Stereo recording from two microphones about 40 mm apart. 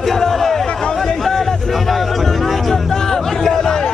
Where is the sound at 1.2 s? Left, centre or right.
Centre.